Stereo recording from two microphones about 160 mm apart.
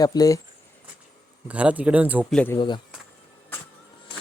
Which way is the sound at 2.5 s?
30° left (ahead or behind).